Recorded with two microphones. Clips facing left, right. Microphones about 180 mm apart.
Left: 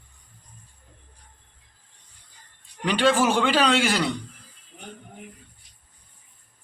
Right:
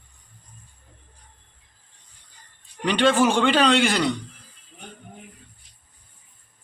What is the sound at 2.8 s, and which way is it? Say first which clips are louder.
A man's voice: right 2 dB; 5° left (ahead or behind).